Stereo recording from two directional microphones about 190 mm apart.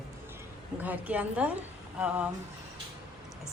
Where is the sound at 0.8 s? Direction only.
10° right (ahead or behind).